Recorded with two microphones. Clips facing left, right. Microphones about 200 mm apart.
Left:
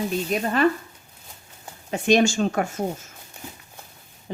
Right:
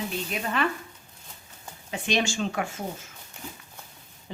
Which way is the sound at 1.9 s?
45° left (ahead or behind).